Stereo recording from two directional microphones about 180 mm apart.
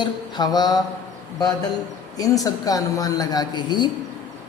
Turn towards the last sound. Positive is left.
turn(degrees=25)  # may be behind; listen again after turning